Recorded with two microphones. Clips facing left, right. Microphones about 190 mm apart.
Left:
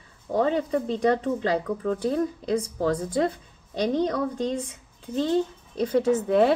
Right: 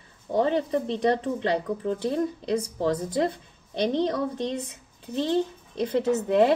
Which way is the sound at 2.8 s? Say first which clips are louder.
Left 1 dB; 25° right (ahead or behind).